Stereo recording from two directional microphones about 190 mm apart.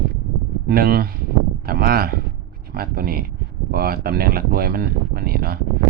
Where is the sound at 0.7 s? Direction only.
50° right (ahead or behind).